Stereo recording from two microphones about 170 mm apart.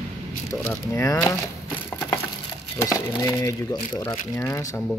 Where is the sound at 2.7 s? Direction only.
15° left (ahead or behind).